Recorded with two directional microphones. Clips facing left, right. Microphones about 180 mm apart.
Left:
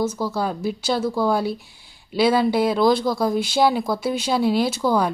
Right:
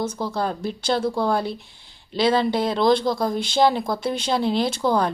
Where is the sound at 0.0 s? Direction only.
5° left (ahead or behind).